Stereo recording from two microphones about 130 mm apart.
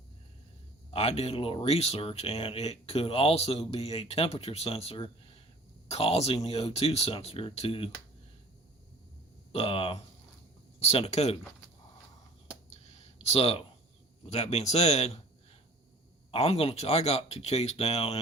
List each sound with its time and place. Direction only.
0.9 s speech: 50° left (ahead or behind)
9.5 s speech: 45° left (ahead or behind)
12.7 s a sound: 50° left (ahead or behind)
14.3 s speech: 50° left (ahead or behind)
16.3 s speech: 50° left (ahead or behind)